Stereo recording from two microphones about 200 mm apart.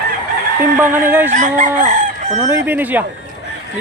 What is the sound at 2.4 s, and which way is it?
Speech, 10° right (ahead or behind).